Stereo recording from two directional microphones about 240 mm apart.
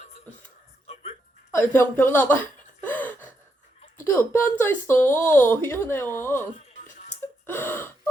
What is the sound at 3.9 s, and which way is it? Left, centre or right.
Speech, centre.